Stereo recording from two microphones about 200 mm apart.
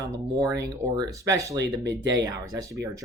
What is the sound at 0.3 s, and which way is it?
Speech, 15° right (ahead or behind).